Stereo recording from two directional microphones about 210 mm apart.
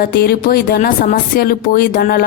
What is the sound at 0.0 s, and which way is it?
Speech, 45° left (ahead or behind).